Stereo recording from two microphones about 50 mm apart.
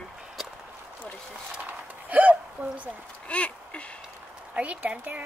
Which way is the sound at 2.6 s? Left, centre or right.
Right.